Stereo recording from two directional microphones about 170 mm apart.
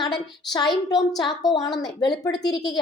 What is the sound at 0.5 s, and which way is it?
A woman's voice, 25° left (ahead or behind).